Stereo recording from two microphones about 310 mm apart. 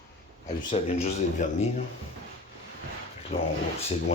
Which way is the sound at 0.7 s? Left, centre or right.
Left.